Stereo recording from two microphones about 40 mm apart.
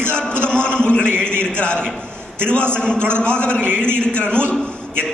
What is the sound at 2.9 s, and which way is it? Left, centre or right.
Speech, right.